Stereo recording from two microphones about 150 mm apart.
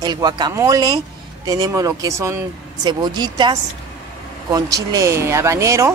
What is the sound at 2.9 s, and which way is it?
Speech, 30° right (ahead or behind).